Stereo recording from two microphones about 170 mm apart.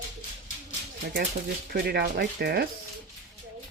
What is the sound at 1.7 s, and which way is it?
Speech, 65° right (ahead or behind).